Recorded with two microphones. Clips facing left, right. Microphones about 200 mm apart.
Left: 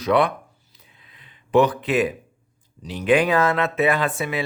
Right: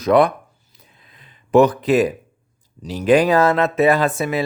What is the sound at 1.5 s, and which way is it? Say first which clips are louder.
Speech: right 5 dB; 45° right (ahead or behind).